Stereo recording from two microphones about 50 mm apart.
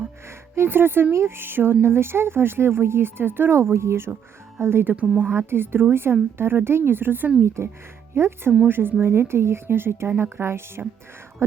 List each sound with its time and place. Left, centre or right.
0.5 s speech: right
3.5 s speech: right
4.6 s speech: right
4.9 s a woman's voice: right
5.3 s speech: right
7.4 s speech: right
8.1 s speech: right
8.6 s speech: right